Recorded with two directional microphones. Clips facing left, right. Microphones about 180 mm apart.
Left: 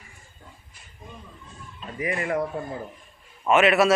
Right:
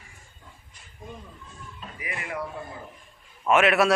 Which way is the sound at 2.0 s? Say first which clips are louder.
Left 9 dB; 40° left (ahead or behind).